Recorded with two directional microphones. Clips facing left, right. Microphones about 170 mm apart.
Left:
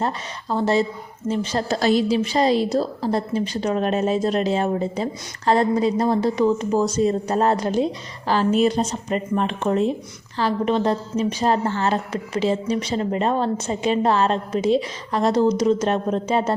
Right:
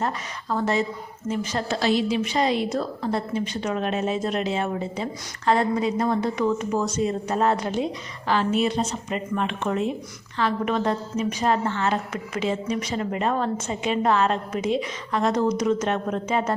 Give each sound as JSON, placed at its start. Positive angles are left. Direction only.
{"t": 0.5, "sound": "a woman's voice", "side_deg": 30}